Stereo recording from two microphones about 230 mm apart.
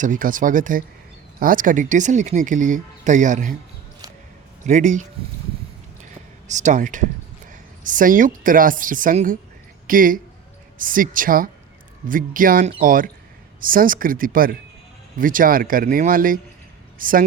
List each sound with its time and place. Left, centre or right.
0.0 s speech: right
4.6 s speech: right
6.5 s speech: right